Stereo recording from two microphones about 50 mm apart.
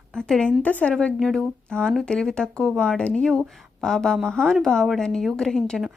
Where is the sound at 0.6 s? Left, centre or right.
Left.